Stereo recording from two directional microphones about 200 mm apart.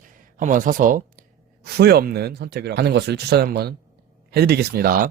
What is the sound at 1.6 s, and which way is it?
Speech, 50° right (ahead or behind).